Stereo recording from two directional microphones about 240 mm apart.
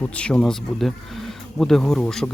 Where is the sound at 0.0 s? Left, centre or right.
Centre.